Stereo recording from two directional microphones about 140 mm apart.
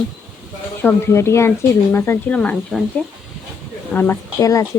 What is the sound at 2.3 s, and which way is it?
Speech, 5° left (ahead or behind).